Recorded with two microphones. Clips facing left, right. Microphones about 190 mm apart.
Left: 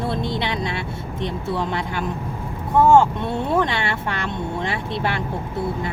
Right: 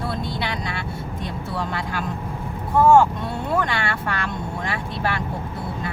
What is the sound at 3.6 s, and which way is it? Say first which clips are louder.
Speech: left 3 dB; 20° left (ahead or behind).